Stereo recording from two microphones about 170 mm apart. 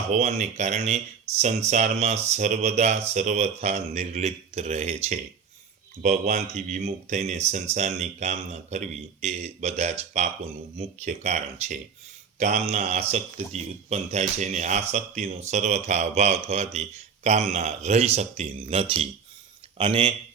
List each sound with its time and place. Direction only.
0.1 s speech: 40° right (ahead or behind)